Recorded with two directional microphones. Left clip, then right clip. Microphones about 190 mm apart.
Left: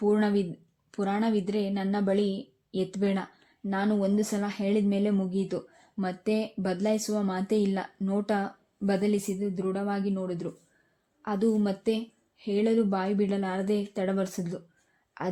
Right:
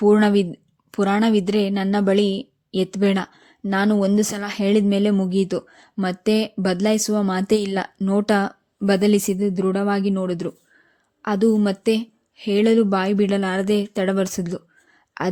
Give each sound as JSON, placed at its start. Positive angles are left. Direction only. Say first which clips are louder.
{"t": 0.0, "sound": "a woman's voice", "louder": "right 10 dB", "side_deg": -35}